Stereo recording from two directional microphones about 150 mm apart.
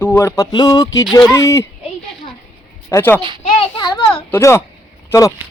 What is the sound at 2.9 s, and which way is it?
Speech, 15° left (ahead or behind).